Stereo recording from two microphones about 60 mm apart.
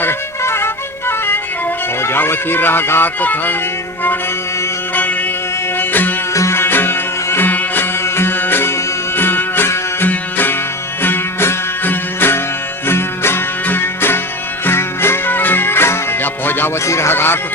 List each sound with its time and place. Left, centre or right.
0.0 s music: left
2.0 s speech: left
3.2 s music: left
5.9 s music: left
6.3 s music: left
6.6 s music: left
16.8 s speech: left